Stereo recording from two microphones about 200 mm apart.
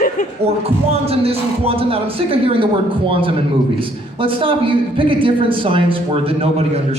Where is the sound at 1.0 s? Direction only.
30° right (ahead or behind).